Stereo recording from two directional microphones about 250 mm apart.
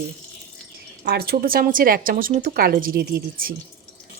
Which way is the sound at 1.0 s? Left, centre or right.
Right.